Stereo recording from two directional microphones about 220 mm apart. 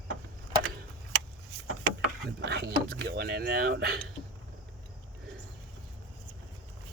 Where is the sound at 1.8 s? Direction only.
50° right (ahead or behind).